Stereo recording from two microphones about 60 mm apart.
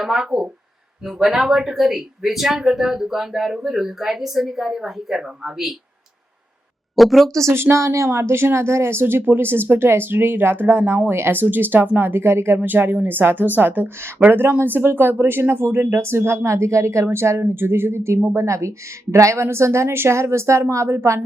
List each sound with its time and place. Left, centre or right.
0.0 s speech: centre
6.9 s speech: centre
7.3 s speech: right
12.5 s speech: right